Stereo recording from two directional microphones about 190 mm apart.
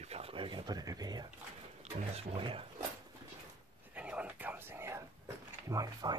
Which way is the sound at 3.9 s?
5° right (ahead or behind).